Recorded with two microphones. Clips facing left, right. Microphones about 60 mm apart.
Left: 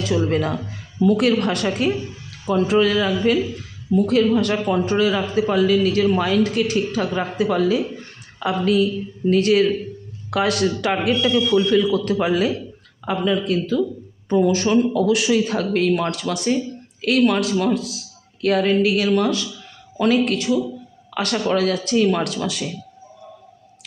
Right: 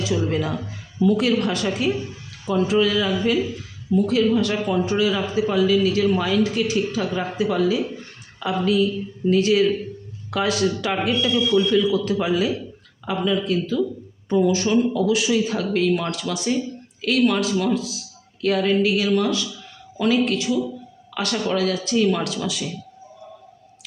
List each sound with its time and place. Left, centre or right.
0.0 s speech: left